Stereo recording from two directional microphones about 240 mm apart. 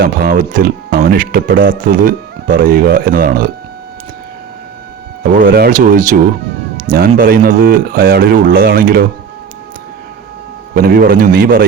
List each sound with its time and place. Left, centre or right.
0.0 s speech: right
5.2 s speech: right
6.7 s cat: right
7.1 s speech: right
10.8 s speech: right